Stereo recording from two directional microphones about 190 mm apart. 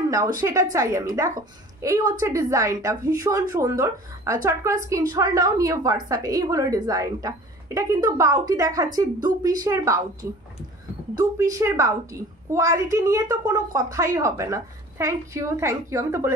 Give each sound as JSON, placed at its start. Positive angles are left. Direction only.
{"t": 0.1, "sound": "a woman's voice", "side_deg": -15}
{"t": 11.1, "sound": "a woman's voice", "side_deg": -15}